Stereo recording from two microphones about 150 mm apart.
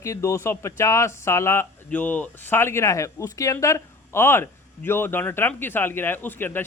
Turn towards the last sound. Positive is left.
turn(degrees=15)  # may be behind; listen again after turning